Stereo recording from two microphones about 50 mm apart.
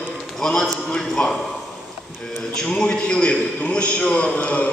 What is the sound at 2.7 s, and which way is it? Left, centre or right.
A man's voice, centre.